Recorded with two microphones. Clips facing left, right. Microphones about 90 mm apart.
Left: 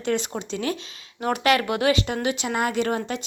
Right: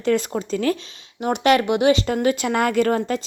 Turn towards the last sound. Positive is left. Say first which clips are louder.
# right 5 dB
turn(degrees=-40)  # may be behind; listen again after turning